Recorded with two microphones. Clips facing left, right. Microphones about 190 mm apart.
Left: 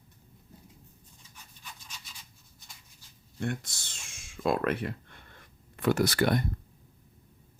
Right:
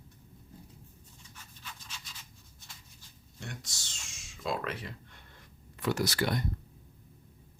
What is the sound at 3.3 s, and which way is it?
Speech, 55° left (ahead or behind).